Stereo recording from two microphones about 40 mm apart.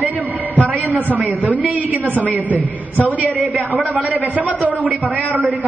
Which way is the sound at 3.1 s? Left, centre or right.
Right.